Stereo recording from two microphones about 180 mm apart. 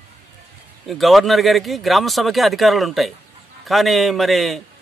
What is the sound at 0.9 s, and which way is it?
A man's voice, centre (ahead or behind).